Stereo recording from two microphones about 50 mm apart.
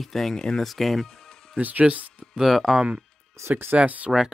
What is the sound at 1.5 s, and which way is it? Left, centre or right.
Speech, right.